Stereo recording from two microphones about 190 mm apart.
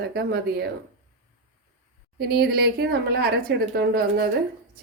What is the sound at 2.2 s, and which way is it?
A woman's voice, 55° right (ahead or behind).